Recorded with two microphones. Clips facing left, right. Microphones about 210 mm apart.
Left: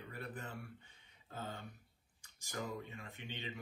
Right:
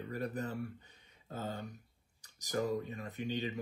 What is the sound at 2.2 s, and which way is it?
Speech, 40° right (ahead or behind).